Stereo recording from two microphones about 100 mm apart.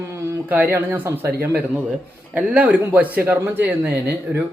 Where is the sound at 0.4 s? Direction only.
15° right (ahead or behind).